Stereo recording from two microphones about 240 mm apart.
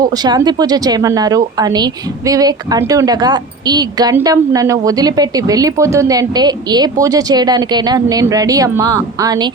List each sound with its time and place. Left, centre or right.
0.0 s speech: centre